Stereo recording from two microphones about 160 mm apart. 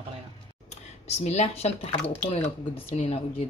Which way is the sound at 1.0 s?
45° left (ahead or behind).